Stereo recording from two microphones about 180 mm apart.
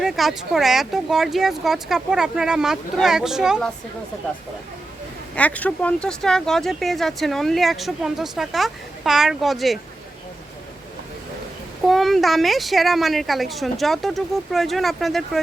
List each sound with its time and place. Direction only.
0.0 s speech: centre (ahead or behind)
5.3 s speech: 10° left (ahead or behind)
11.9 s speech: centre (ahead or behind)